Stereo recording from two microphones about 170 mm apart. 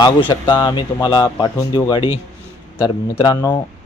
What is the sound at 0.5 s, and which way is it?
Speech, 20° left (ahead or behind).